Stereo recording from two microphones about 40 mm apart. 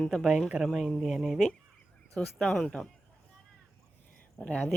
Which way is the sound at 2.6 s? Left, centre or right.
Centre.